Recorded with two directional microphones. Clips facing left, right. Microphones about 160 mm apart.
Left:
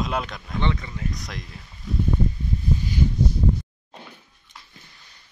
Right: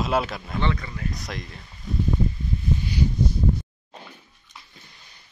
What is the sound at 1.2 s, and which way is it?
Speech, centre (ahead or behind).